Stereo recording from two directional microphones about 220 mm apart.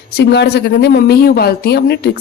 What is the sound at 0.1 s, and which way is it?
A woman's voice, 50° left (ahead or behind).